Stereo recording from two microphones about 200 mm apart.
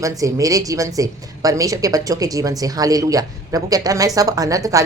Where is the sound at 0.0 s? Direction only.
15° right (ahead or behind).